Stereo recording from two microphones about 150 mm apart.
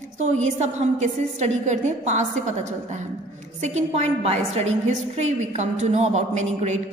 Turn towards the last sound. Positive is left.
turn(degrees=-50)  # may be behind; listen again after turning